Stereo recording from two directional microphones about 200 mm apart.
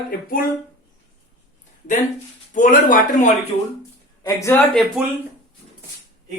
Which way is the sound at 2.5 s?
40° left (ahead or behind).